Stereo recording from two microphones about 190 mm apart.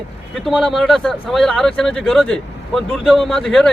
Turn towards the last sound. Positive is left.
turn(degrees=5)  # may be behind; listen again after turning